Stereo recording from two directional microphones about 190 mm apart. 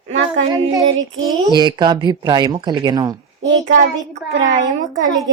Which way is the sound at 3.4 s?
75° right (ahead or behind).